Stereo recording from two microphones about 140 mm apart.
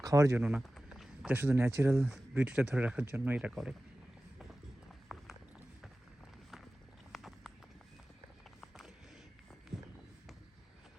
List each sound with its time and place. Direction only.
0.0 s speech: 25° right (ahead or behind)
0.4 s speech: 5° right (ahead or behind); by 2.0 s 20° right (ahead or behind)
2.3 s speech: 10° right (ahead or behind)
5.1 s clip-clop: centre (ahead or behind)
7.1 s horse: centre (ahead or behind)
8.6 s a sound: centre (ahead or behind)